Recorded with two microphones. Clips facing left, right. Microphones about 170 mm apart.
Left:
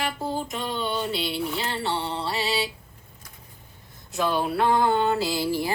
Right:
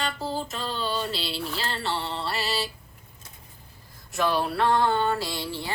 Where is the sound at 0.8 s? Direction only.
20° left (ahead or behind).